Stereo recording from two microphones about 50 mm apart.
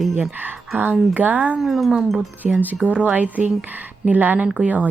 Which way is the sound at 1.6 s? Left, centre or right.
Centre.